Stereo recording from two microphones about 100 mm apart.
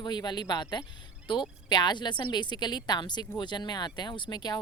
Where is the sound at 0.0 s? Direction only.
45° left (ahead or behind).